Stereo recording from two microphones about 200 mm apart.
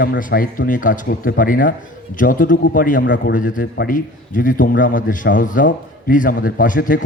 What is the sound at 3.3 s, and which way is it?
Speech, 40° left (ahead or behind).